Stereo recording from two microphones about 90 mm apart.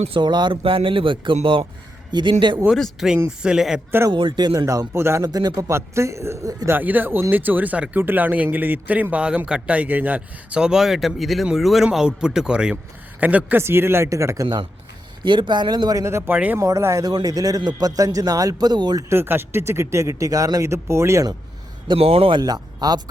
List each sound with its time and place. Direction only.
0.1 s speech: 55° right (ahead or behind)
2.6 s speech: centre (ahead or behind)
4.1 s speech: 65° right (ahead or behind)
4.6 s speech: 35° right (ahead or behind)
5.2 s speech: 45° right (ahead or behind)
6.7 s a man's voice: 20° right (ahead or behind)
13.6 s speech: 25° right (ahead or behind)
15.2 s speech: 60° right (ahead or behind)
15.9 s speech: 35° right (ahead or behind)
16.3 s speech: 15° right (ahead or behind)
16.6 s a man's voice: 35° right (ahead or behind); by 19.0 s 50° right (ahead or behind)
19.0 s speech: 25° right (ahead or behind)
21.8 s a man's voice: 90° right
22.4 s speech: 50° right (ahead or behind)